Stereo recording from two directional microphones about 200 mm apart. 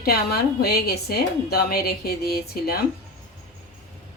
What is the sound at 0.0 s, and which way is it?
A woman's voice, 50° left (ahead or behind).